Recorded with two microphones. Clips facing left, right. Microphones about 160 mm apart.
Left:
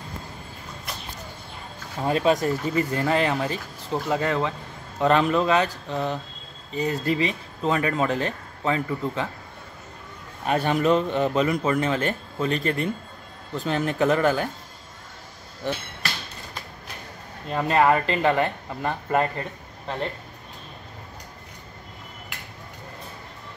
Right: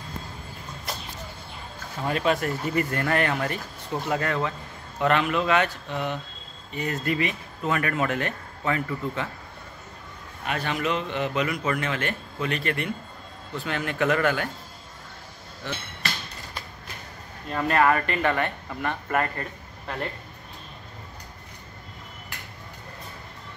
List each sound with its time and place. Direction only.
2.0 s speech: 30° left (ahead or behind)
10.4 s speech: 40° left (ahead or behind)
17.5 s speech: 25° left (ahead or behind)